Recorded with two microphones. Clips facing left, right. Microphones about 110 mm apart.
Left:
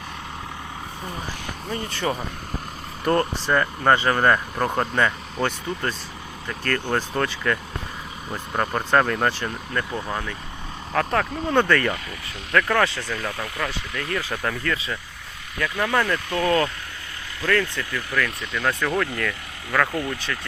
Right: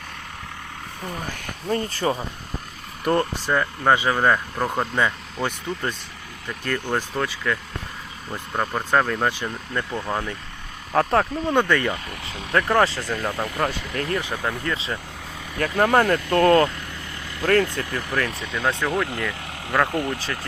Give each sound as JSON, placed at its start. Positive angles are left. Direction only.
{"t": 1.3, "sound": "speech", "side_deg": -45}
{"t": 3.0, "sound": "speech", "side_deg": -10}
{"t": 7.2, "sound": "speech", "side_deg": -5}
{"t": 9.7, "sound": "speech", "side_deg": -20}
{"t": 10.9, "sound": "speech", "side_deg": -30}
{"t": 11.5, "sound": "speech", "side_deg": -15}
{"t": 12.5, "sound": "speech", "side_deg": -30}
{"t": 14.2, "sound": "speech", "side_deg": -20}
{"t": 15.5, "sound": "speech", "side_deg": -40}
{"t": 18.5, "sound": "speech", "side_deg": -20}